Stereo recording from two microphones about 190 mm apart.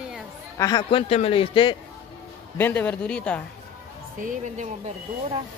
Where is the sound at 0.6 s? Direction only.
20° left (ahead or behind).